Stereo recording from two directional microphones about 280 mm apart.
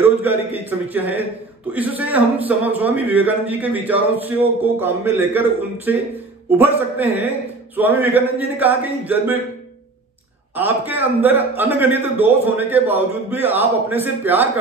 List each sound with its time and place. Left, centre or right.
0.2 s a man's voice: centre
10.5 s a man's voice: centre